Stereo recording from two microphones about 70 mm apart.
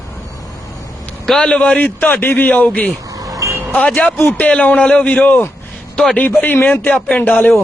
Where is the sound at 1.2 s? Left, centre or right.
Centre.